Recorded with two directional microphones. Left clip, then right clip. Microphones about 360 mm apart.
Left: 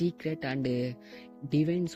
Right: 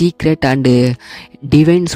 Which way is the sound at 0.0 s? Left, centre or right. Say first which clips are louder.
Right 18 dB; right.